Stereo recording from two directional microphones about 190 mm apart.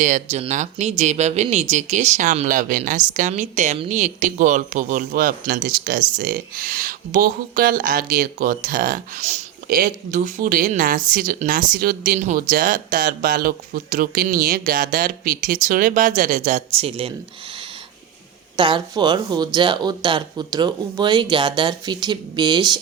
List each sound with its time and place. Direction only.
0.0 s a woman's voice: 40° right (ahead or behind)
18.5 s speech: 25° right (ahead or behind)